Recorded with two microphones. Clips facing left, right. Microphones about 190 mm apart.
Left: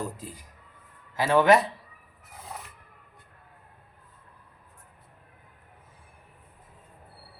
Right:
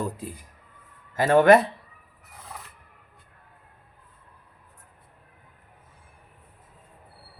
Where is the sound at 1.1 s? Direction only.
50° right (ahead or behind).